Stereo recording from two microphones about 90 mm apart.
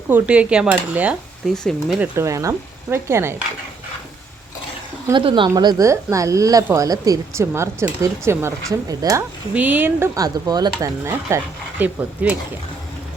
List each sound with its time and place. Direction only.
0.1 s speech: 15° right (ahead or behind)
1.5 s speech: 5° left (ahead or behind)
2.1 s speech: 35° right (ahead or behind)
5.1 s speech: 65° right (ahead or behind)
5.5 s speech: 45° right (ahead or behind); by 8.5 s 30° right (ahead or behind)
8.9 s speech: 40° right (ahead or behind)
9.6 s speech: 20° right (ahead or behind)
10.2 s speech: 45° right (ahead or behind)
11.8 s speech: 15° right (ahead or behind)